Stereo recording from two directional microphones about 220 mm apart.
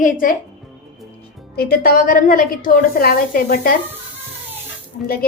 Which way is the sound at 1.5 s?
45° left (ahead or behind).